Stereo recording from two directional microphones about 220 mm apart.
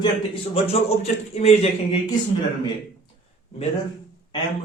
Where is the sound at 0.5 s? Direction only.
25° left (ahead or behind).